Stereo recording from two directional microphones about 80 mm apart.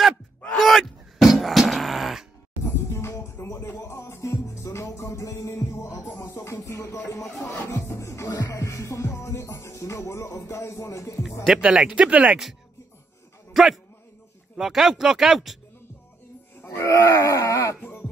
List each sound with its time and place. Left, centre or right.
0.5 s beatboxing: centre
2.6 s music: left
6.6 s music: left
7.2 s speech: centre
7.5 s music: left
11.4 s speech: centre
13.5 s a sound: centre
14.6 s speech: centre
16.6 s music: left